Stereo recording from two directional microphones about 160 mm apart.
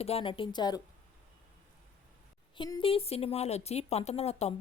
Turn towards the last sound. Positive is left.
turn(degrees=40)  # may be behind; listen again after turning